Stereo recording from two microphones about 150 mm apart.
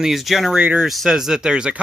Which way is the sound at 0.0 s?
Centre (ahead or behind).